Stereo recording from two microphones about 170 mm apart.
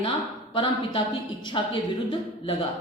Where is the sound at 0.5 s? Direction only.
30° left (ahead or behind).